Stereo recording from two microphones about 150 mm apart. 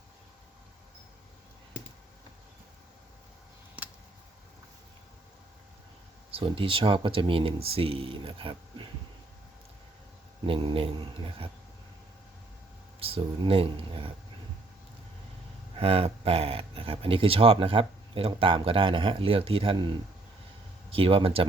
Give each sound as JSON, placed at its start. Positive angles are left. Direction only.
{"t": 6.3, "sound": "speech", "side_deg": -35}
{"t": 10.4, "sound": "speech", "side_deg": -35}
{"t": 13.0, "sound": "speech", "side_deg": -40}
{"t": 15.8, "sound": "speech", "side_deg": -40}